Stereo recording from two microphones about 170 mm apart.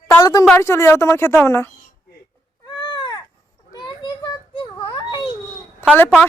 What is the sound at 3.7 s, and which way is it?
Children playing, 25° left (ahead or behind).